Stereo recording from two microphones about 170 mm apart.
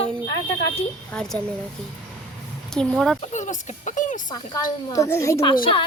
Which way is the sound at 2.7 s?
5° left (ahead or behind).